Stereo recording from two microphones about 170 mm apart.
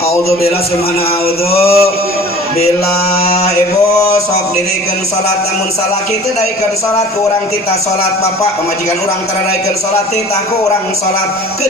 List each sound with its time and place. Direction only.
1.5 s mantra: 35° left (ahead or behind)
3.2 s mantra: 35° left (ahead or behind)